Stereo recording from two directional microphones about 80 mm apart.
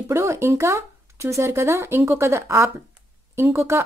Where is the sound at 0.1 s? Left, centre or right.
Right.